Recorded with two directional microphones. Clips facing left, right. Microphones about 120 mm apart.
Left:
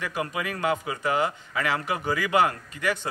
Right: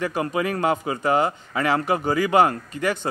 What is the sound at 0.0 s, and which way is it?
A man's voice, 35° right (ahead or behind).